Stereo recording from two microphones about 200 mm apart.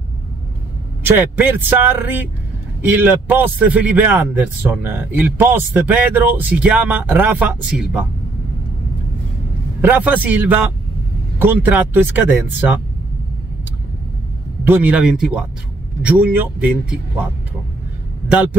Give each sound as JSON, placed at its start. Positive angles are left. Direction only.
{"t": 1.0, "sound": "a man's voice", "side_deg": -10}
{"t": 9.8, "sound": "a man's voice", "side_deg": -10}
{"t": 14.6, "sound": "a man's voice", "side_deg": -10}